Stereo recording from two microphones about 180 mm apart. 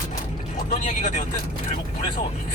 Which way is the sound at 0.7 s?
45° left (ahead or behind).